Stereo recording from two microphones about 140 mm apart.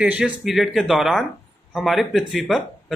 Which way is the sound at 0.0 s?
5° right (ahead or behind).